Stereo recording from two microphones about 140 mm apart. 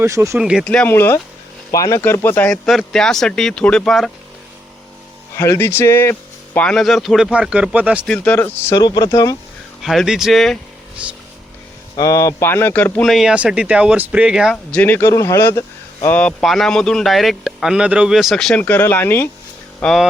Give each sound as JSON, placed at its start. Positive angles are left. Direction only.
{"t": 0.0, "sound": "speech", "side_deg": -20}
{"t": 0.3, "sound": "speech", "side_deg": -5}
{"t": 0.6, "sound": "speech", "side_deg": 5}
{"t": 0.9, "sound": "speech", "side_deg": 20}
{"t": 5.4, "sound": "speech", "side_deg": 15}
{"t": 8.0, "sound": "speech", "side_deg": 10}
{"t": 8.8, "sound": "speech", "side_deg": 25}
{"t": 9.8, "sound": "speech", "side_deg": 0}
{"t": 11.0, "sound": "speech", "side_deg": -10}
{"t": 11.9, "sound": "speech", "side_deg": 25}
{"t": 13.1, "sound": "speech", "side_deg": -5}
{"t": 14.5, "sound": "speech", "side_deg": 10}
{"t": 19.8, "sound": "speech", "side_deg": 0}